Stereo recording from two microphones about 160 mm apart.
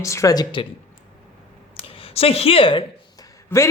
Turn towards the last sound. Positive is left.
turn(degrees=15)  # may be behind; listen again after turning